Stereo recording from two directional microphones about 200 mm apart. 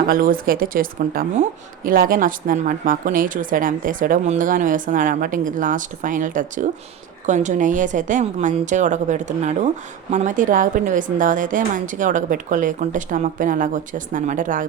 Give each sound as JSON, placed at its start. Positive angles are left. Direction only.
{"t": 0.1, "sound": "a woman's voice", "side_deg": -45}